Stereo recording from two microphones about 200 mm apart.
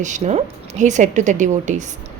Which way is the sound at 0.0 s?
35° right (ahead or behind).